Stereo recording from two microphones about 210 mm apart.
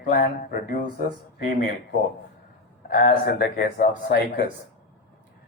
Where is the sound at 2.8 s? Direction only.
45° left (ahead or behind).